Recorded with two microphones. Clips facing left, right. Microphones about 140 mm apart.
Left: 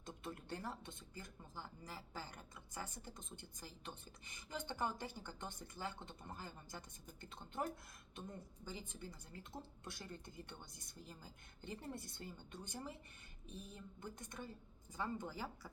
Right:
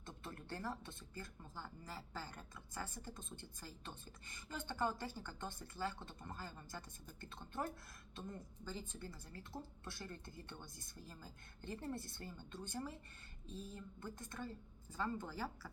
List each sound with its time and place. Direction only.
0.0 s speech: 15° left (ahead or behind)
8.6 s speech: 15° left (ahead or behind)